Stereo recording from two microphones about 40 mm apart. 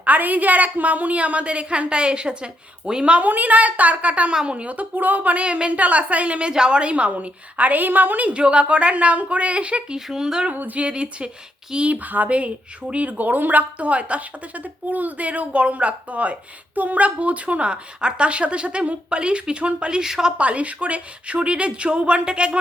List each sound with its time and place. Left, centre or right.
0.0 s speech: right
3.2 s speech: right
5.4 s speech: right
6.4 s speech: right
8.3 s speech: right
9.9 s speech: centre
10.5 s a woman's voice: right
10.8 s a woman's voice: right
11.9 s a woman's voice: right
20.0 s speech: centre
20.4 s a woman's voice: right